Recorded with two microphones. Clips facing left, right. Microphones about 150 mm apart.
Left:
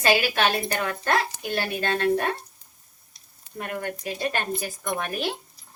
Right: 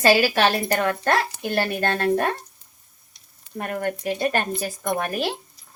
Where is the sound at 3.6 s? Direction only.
45° right (ahead or behind).